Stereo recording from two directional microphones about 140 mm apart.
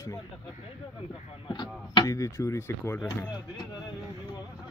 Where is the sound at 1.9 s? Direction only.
25° left (ahead or behind).